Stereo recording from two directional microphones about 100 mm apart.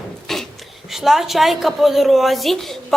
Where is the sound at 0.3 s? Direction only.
5° left (ahead or behind).